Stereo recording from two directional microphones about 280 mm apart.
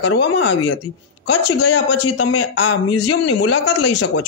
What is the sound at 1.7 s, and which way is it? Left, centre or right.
Speech, left.